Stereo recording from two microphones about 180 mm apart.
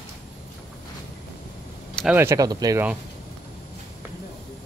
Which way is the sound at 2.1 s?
15° right (ahead or behind).